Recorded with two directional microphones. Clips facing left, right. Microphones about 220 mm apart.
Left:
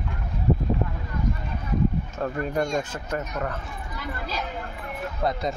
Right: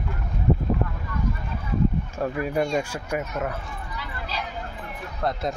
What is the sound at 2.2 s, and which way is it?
Speech, 5° right (ahead or behind).